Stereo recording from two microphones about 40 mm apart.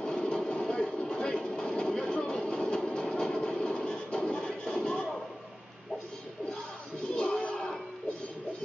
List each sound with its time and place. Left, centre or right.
0.0 s a sound: left
2.1 s music: left
7.2 s music: left